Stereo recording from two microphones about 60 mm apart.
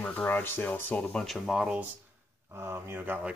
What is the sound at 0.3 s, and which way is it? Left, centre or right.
Speech, left.